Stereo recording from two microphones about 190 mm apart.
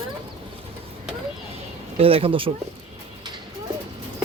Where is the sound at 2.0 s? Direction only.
30° right (ahead or behind).